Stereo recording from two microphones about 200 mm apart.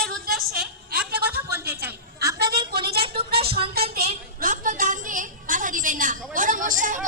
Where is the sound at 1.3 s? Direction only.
10° right (ahead or behind).